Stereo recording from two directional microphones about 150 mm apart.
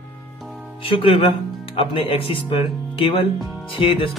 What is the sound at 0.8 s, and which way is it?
Speech, 35° left (ahead or behind).